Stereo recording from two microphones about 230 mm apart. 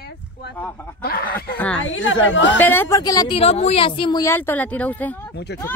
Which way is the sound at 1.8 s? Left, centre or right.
Left.